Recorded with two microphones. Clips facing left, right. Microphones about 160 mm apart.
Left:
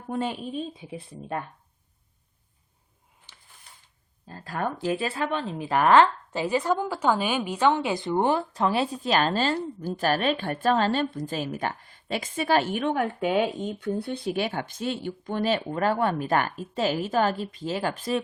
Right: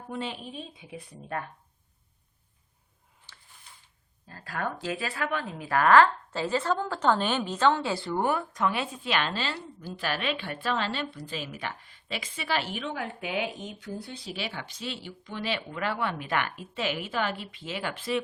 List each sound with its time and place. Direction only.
0.1 s a woman's voice: 45° left (ahead or behind)
1.1 s speech: 20° left (ahead or behind)
4.3 s speech: 20° left (ahead or behind); by 18.2 s 40° left (ahead or behind)